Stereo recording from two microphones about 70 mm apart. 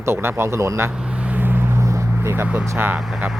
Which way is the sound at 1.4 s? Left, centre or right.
Right.